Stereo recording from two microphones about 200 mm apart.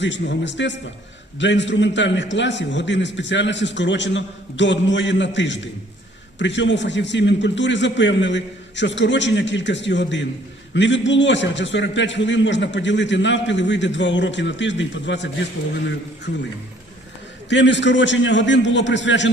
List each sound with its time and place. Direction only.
0.0 s a man's voice: 65° left (ahead or behind)
17.5 s a man's voice: 65° left (ahead or behind)